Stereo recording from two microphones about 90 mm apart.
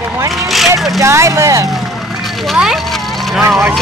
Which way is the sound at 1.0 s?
35° right (ahead or behind).